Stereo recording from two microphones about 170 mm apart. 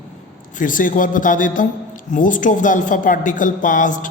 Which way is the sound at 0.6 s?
50° left (ahead or behind).